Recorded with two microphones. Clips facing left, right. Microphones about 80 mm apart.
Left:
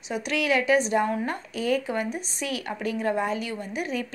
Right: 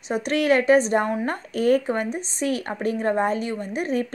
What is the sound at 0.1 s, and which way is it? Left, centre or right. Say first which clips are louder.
A woman's voice: right 5 dB; right.